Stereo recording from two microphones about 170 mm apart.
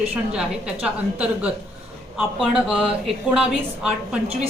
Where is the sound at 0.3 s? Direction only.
5° right (ahead or behind).